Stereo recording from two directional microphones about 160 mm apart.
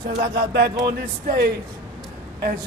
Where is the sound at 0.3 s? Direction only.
90° right.